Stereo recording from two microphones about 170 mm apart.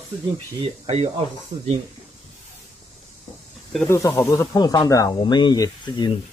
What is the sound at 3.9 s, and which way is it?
Speech, 20° left (ahead or behind).